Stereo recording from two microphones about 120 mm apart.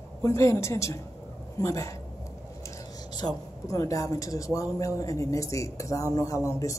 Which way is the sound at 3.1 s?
30° left (ahead or behind).